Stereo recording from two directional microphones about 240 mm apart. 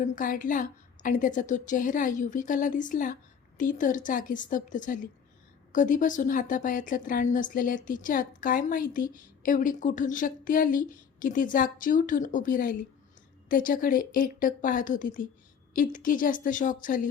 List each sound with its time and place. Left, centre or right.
0.0 s speech: left